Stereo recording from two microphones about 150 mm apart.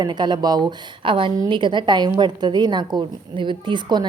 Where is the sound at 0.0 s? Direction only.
30° right (ahead or behind).